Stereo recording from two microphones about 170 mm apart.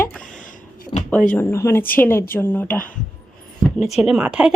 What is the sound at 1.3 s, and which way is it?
A woman's voice, 15° left (ahead or behind).